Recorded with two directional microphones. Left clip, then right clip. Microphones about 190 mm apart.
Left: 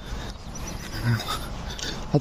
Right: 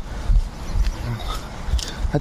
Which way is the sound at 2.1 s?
20° left (ahead or behind).